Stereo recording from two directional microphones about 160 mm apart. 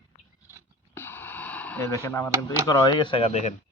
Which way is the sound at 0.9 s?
15° left (ahead or behind).